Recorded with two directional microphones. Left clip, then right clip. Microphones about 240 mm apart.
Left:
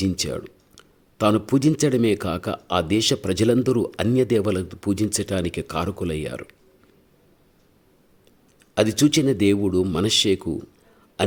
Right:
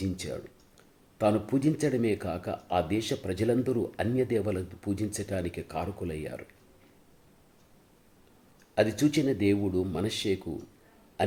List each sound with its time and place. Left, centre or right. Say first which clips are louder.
0.0 s speech: left 10 dB; left
8.7 s speech: left 7 dB; left
11.2 s a sound: left 6 dB; left